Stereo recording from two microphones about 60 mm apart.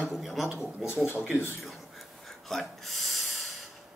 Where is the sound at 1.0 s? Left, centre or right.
Left.